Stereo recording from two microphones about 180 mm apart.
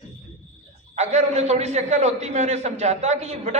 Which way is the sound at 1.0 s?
40° right (ahead or behind).